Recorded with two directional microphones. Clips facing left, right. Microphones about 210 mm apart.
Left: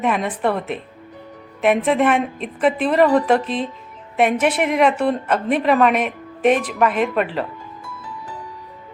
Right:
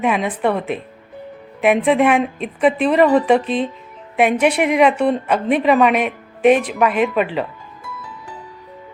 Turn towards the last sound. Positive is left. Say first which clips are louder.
# right 2 dB
turn(degrees=0)  # may be behind; listen again after turning